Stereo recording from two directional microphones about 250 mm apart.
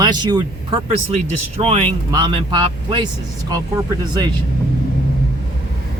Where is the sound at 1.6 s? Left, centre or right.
Right.